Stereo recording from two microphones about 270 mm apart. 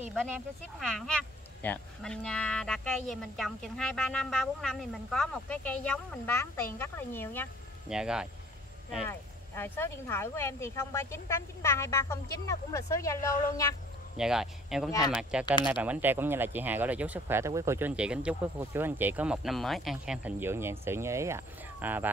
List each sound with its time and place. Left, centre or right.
0.7 s speech: centre
7.9 s speech: centre
9.6 s speech: centre
14.1 s speech: centre